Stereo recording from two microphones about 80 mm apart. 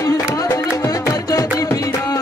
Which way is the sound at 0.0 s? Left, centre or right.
Left.